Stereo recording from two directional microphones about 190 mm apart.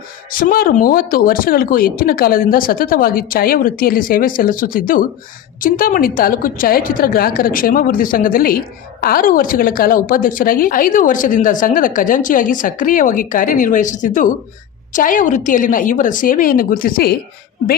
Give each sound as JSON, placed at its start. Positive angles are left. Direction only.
{"t": 0.3, "sound": "a woman's voice", "side_deg": 50}